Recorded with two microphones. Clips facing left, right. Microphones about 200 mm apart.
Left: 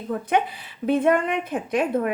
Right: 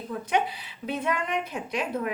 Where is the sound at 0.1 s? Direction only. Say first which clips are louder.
Left 4 dB; 50° left (ahead or behind).